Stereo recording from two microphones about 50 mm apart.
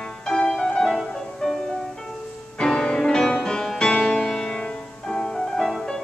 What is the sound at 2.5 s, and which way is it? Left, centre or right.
Music, centre.